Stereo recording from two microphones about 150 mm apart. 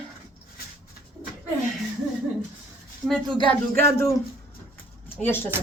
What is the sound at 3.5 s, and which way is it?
Speech, 15° left (ahead or behind).